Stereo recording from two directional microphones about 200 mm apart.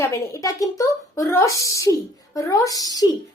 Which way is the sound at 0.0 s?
15° left (ahead or behind).